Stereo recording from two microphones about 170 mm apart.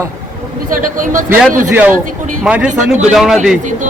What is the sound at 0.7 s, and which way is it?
Speech, 50° right (ahead or behind).